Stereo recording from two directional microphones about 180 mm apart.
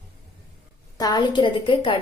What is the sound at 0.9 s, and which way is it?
A woman's voice, 20° left (ahead or behind).